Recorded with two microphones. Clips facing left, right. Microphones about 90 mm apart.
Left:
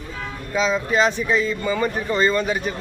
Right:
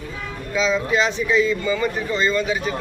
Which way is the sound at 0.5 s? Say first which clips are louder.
Even; 40° left (ahead or behind).